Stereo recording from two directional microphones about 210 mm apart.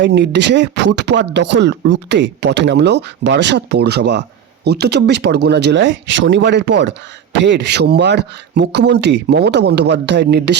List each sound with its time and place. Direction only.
0.0 s speech: 55° right (ahead or behind)